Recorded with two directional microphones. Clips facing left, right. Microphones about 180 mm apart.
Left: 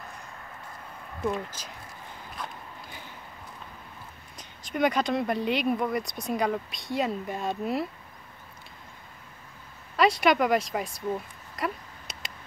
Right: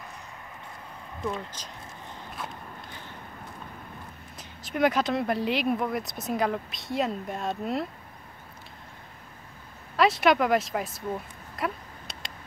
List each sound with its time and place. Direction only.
1.2 s speech: 5° left (ahead or behind)
4.4 s speech: 5° right (ahead or behind)
9.9 s speech: centre (ahead or behind)
11.5 s a sound: centre (ahead or behind)